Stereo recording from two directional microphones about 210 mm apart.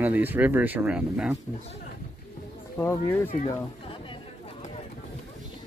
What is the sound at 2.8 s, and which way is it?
Speech, 10° left (ahead or behind).